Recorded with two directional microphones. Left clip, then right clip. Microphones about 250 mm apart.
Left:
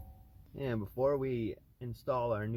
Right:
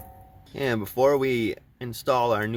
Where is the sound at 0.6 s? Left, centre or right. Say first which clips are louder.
Right 11 dB; centre.